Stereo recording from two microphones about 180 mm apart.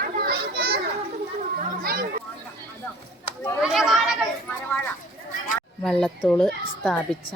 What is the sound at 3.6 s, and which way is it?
Chatter, 5° right (ahead or behind).